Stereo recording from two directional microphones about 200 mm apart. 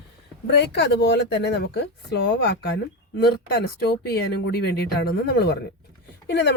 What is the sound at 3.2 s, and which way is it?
Speech, 50° left (ahead or behind).